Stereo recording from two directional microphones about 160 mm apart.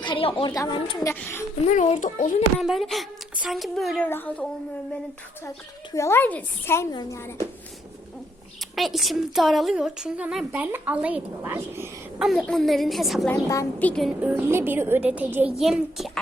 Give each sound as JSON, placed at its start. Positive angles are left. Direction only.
{"t": 0.0, "sound": "a woman's voice", "side_deg": 30}
{"t": 1.0, "sound": "a woman's voice", "side_deg": 15}
{"t": 1.6, "sound": "a child's voice", "side_deg": 45}
{"t": 2.6, "sound": "a woman's voice", "side_deg": 0}
{"t": 5.9, "sound": "a woman's voice", "side_deg": 15}
{"t": 6.9, "sound": "a woman's voice", "side_deg": 25}
{"t": 8.7, "sound": "a woman's voice", "side_deg": 0}
{"t": 12.2, "sound": "a woman's voice", "side_deg": 0}
{"t": 13.3, "sound": "a woman's voice", "side_deg": 20}
{"t": 14.2, "sound": "a child's voice", "side_deg": -10}